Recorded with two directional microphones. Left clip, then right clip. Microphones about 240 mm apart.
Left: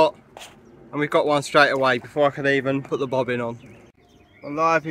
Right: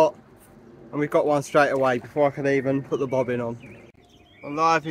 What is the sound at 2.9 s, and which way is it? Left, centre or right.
Speech, left.